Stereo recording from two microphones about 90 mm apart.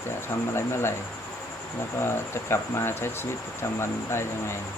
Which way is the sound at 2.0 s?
25° left (ahead or behind).